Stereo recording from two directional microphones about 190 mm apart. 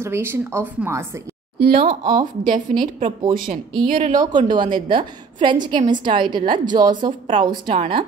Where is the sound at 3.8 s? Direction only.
45° right (ahead or behind).